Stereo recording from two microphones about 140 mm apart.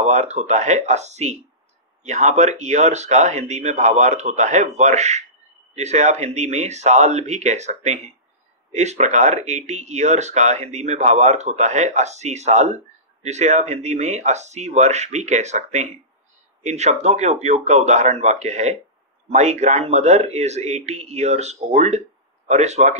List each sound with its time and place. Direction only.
0.0 s a man's voice: 55° right (ahead or behind)